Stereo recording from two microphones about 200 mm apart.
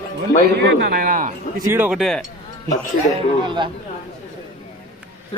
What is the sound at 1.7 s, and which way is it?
Speech, 10° right (ahead or behind).